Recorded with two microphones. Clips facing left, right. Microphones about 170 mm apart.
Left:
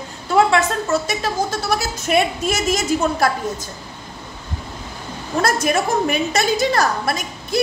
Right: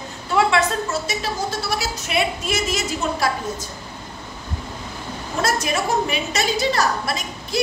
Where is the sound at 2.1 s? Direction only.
45° left (ahead or behind).